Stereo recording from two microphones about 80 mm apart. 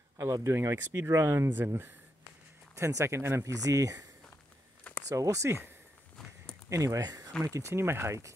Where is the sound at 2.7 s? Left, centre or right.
Right.